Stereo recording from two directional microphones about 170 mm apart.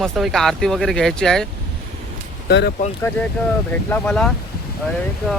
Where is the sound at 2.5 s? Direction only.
85° left.